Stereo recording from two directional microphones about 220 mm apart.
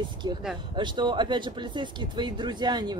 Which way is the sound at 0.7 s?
20° right (ahead or behind).